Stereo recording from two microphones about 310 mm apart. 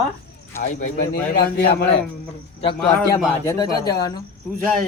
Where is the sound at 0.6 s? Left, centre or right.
Left.